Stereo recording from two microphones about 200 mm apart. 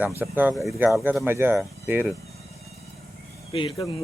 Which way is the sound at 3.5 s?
25° left (ahead or behind).